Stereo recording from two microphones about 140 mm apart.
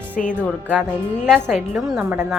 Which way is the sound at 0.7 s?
10° left (ahead or behind).